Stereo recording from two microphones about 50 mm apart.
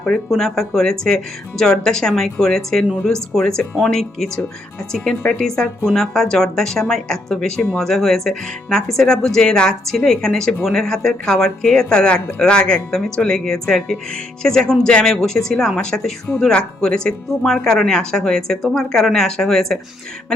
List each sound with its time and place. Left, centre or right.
0.3 s speech: centre